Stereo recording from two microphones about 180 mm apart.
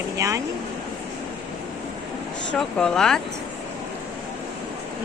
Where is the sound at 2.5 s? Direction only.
5° left (ahead or behind).